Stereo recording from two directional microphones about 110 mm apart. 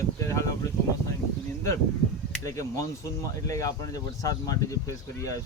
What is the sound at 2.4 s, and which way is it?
Speech, 30° left (ahead or behind).